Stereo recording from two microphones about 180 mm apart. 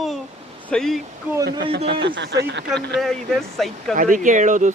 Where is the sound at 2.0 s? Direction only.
80° right.